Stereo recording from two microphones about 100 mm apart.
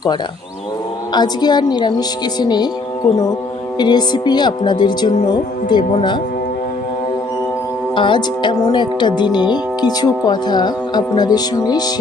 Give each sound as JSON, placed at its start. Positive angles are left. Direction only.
{"t": 1.1, "sound": "speech", "side_deg": 45}
{"t": 3.8, "sound": "speech", "side_deg": 45}
{"t": 7.9, "sound": "speech", "side_deg": 55}